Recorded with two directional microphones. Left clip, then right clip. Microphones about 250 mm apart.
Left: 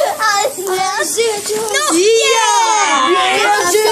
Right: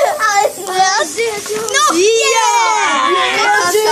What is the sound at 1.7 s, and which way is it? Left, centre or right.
Children playing, centre.